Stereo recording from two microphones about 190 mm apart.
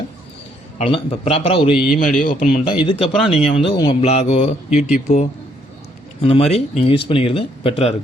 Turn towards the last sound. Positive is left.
turn(degrees=30)  # may be behind; listen again after turning